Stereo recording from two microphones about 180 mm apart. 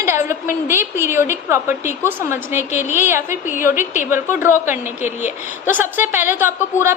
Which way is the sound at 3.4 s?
45° left (ahead or behind).